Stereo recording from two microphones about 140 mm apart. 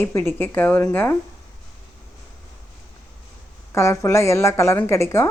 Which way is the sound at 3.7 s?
20° left (ahead or behind).